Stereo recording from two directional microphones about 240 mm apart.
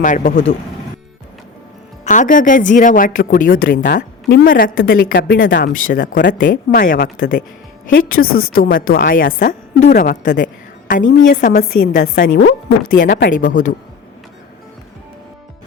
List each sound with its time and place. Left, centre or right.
0.0 s a woman's voice: left
2.0 s a woman's voice: left
5.7 s a woman's voice: left
11.0 s a woman's voice: left
11.3 s a woman's voice: left